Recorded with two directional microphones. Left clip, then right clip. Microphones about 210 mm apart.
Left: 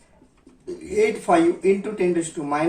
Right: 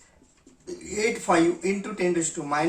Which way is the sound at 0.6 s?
25° right (ahead or behind).